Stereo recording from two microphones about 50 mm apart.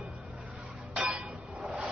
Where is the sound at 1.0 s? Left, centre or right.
Right.